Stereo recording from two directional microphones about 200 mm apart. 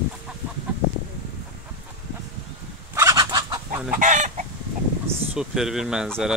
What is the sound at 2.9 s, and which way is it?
Fowl, 15° right (ahead or behind).